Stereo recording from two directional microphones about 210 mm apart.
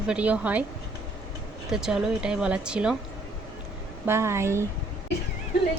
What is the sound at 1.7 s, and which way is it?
A woman's voice, centre (ahead or behind).